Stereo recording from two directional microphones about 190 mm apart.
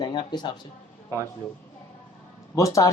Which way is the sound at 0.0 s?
20° left (ahead or behind).